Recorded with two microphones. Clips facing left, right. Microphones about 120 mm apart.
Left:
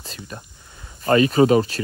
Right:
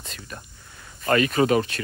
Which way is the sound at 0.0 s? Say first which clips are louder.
Left 3 dB; 35° left (ahead or behind).